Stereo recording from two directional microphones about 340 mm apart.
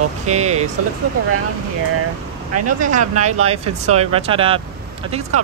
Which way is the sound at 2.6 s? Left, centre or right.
Right.